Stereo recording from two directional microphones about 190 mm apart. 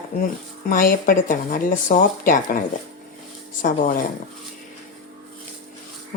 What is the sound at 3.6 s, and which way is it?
Speech, 50° left (ahead or behind).